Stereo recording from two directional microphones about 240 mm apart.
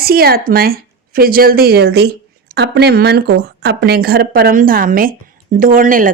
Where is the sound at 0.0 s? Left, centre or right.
Right.